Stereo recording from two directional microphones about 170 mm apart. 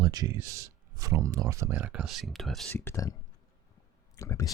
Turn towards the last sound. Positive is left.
turn(degrees=20)  # may be behind; listen again after turning